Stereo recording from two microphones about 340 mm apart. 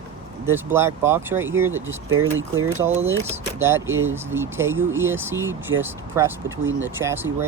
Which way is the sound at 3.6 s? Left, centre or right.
Centre.